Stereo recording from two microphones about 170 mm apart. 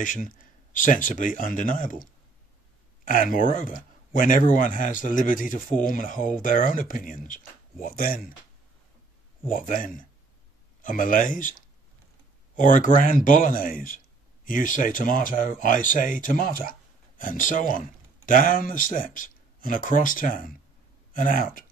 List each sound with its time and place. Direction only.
0.0 s speech: 50° left (ahead or behind)
3.1 s speech: 55° left (ahead or behind)
9.5 s speech: 50° left (ahead or behind)